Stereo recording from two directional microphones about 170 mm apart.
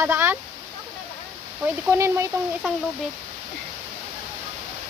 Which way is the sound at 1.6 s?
15° right (ahead or behind).